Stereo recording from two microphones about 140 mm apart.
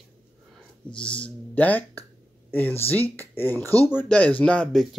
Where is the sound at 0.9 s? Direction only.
10° left (ahead or behind).